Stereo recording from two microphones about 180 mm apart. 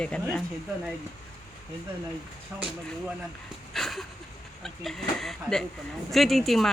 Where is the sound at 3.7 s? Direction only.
Centre (ahead or behind).